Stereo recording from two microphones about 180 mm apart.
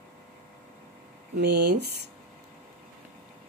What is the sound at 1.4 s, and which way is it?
Speech, 70° right (ahead or behind).